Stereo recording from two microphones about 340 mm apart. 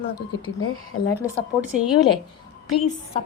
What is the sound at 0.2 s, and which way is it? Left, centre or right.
Speech, left.